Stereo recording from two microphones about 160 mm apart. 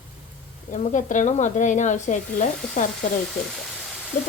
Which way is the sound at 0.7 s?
50° left (ahead or behind).